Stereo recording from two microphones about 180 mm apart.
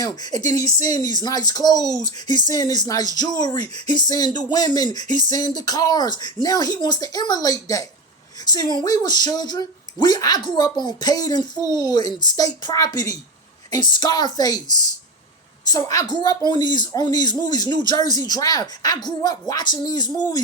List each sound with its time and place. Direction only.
0.0 s speech: 20° left (ahead or behind)
15.6 s speech: 20° left (ahead or behind)